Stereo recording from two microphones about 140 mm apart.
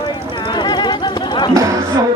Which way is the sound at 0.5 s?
30° left (ahead or behind).